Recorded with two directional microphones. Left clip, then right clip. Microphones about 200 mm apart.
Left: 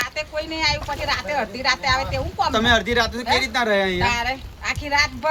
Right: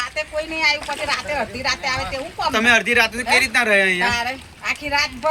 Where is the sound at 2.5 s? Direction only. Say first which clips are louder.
Right 4 dB; 20° left (ahead or behind).